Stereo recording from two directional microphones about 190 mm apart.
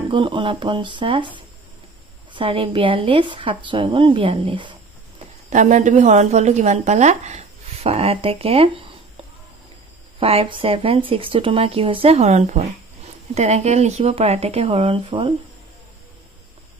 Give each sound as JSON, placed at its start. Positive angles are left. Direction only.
{"t": 0.1, "sound": "a woman's voice", "side_deg": -25}
{"t": 5.5, "sound": "a woman's voice", "side_deg": -40}
{"t": 10.2, "sound": "a woman's voice", "side_deg": -30}